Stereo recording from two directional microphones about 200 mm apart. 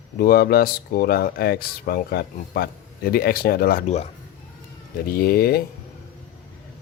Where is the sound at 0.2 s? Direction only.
50° left (ahead or behind).